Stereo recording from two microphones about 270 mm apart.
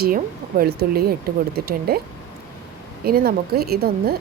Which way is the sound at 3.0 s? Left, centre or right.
Right.